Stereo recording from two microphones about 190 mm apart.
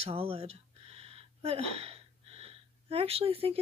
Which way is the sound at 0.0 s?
30° right (ahead or behind).